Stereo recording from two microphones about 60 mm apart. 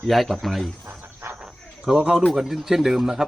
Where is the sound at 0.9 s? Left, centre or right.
Right.